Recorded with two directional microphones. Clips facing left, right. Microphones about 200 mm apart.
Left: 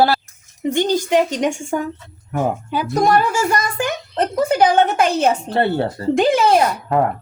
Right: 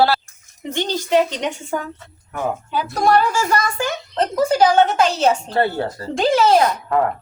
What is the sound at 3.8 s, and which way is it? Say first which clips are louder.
Speech: left 1 dB; 55° left (ahead or behind).